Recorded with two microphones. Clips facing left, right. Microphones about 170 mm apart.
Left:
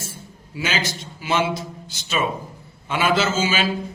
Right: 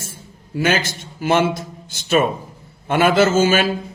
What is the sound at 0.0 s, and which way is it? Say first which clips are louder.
A man's voice: even; 50° right (ahead or behind).